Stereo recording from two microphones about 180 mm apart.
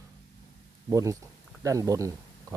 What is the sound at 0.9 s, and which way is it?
Speech, 15° right (ahead or behind).